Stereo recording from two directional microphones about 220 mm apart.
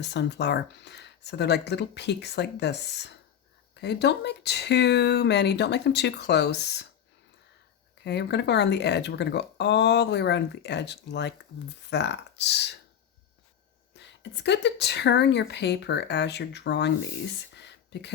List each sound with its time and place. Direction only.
0.0 s speech: 50° left (ahead or behind)
8.0 s speech: 50° left (ahead or behind)
13.9 s speech: 50° left (ahead or behind)
17.5 s a sound: 50° left (ahead or behind)